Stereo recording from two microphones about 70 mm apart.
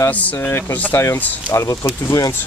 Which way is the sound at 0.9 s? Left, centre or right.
Left.